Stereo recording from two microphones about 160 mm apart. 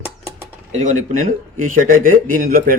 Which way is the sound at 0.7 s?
55° right (ahead or behind).